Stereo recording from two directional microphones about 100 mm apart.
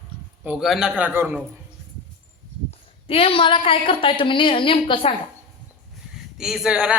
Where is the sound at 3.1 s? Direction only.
65° left (ahead or behind).